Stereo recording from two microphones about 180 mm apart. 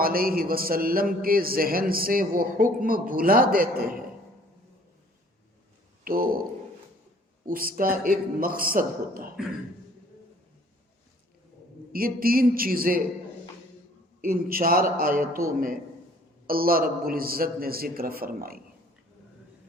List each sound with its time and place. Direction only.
0.0 s a man's voice: 55° right (ahead or behind)
6.1 s a man's voice: 55° right (ahead or behind)
7.4 s a man's voice: 55° right (ahead or behind)
11.9 s a man's voice: 55° right (ahead or behind)
14.2 s a man's voice: 50° right (ahead or behind)
16.5 s a man's voice: 55° right (ahead or behind)